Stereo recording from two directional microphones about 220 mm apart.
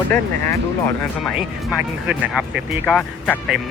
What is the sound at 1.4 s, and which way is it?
Speech, 5° right (ahead or behind).